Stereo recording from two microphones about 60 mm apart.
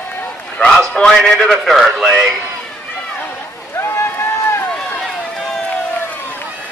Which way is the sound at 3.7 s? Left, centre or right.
Left.